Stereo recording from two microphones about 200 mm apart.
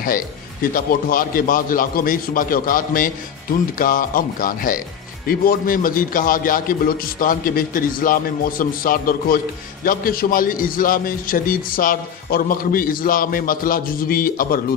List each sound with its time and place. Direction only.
0.0 s a man's voice: 45° left (ahead or behind)